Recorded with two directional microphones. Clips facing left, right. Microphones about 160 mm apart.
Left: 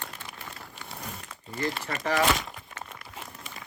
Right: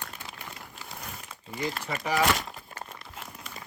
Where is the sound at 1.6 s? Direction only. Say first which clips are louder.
Left 2 dB; centre (ahead or behind).